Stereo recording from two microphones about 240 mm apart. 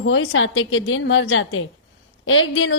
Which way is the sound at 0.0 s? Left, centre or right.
Left.